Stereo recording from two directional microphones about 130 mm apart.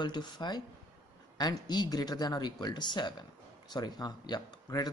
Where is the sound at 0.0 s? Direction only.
35° left (ahead or behind).